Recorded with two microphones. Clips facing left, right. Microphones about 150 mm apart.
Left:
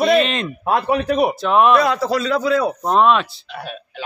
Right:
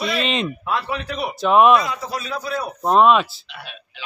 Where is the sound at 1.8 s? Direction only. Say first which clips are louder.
Left 9 dB; 75° left (ahead or behind); by 2.6 s 90° left.